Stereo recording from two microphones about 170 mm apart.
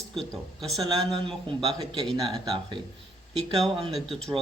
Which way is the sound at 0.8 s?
30° right (ahead or behind).